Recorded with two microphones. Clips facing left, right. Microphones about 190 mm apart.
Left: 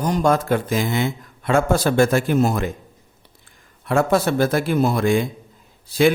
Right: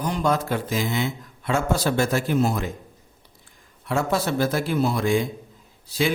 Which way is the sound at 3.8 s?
55° left (ahead or behind).